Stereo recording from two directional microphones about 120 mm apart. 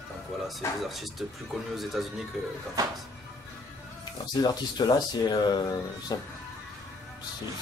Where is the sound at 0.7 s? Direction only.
Centre (ahead or behind).